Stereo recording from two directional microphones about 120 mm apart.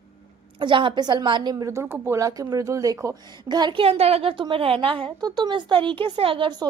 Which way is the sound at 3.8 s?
55° right (ahead or behind).